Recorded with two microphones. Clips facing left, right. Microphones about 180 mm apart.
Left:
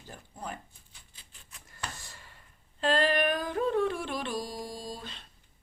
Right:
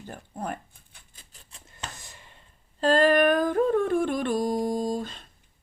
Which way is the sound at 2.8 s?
45° right (ahead or behind).